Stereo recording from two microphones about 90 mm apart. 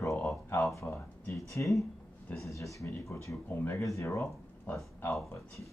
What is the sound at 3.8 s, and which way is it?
Speech, 35° left (ahead or behind).